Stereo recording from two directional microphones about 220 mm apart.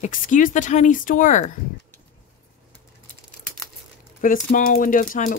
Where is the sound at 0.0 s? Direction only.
35° left (ahead or behind).